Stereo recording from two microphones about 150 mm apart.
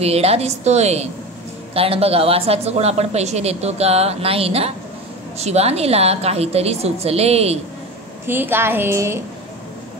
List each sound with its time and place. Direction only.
0.0 s a woman's voice: 45° right (ahead or behind)
8.3 s a woman's voice: 15° right (ahead or behind)